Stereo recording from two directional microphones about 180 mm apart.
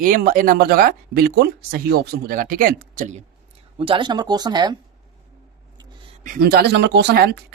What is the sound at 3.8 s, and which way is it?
Speech, 30° right (ahead or behind).